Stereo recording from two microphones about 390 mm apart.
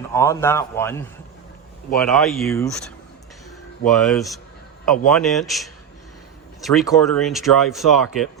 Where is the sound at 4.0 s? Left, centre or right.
Centre.